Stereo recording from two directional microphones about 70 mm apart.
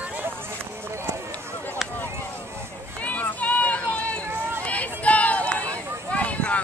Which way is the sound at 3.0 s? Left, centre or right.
Left.